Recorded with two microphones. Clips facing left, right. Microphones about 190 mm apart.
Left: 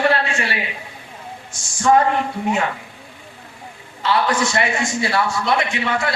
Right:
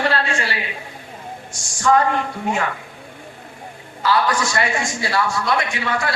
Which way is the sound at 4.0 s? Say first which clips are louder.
Even; 25° left (ahead or behind).